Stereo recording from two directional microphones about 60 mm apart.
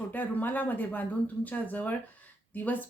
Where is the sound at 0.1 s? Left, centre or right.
Left.